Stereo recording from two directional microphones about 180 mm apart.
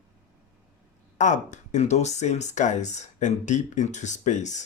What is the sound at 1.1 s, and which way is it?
Speech, 45° left (ahead or behind).